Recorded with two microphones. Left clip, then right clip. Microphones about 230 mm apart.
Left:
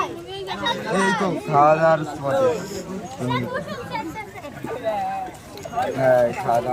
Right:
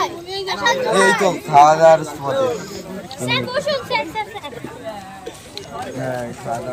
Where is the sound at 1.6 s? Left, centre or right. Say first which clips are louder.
Right 4 dB; right.